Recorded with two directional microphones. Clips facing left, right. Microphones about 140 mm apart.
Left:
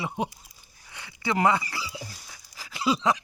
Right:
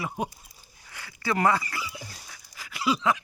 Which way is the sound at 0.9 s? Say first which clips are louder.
Even; 20° left (ahead or behind).